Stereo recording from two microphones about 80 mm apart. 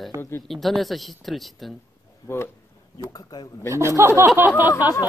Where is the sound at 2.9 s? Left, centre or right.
Left.